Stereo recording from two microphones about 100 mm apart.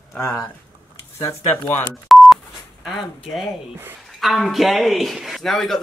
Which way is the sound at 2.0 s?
Centre (ahead or behind).